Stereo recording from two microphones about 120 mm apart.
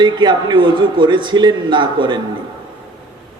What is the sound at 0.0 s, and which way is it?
A man's voice, 40° right (ahead or behind).